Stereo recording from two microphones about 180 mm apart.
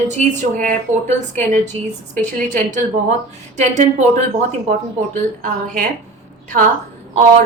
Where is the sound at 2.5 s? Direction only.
45° right (ahead or behind).